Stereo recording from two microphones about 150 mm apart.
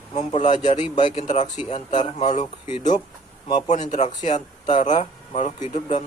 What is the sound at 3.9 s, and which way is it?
A man's voice, 50° left (ahead or behind).